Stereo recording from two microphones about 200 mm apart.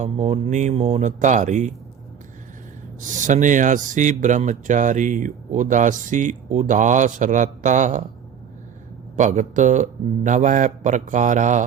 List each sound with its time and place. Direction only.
0.0 s speech: 35° right (ahead or behind)
3.0 s speech: 40° right (ahead or behind)
9.1 s speech: 40° right (ahead or behind)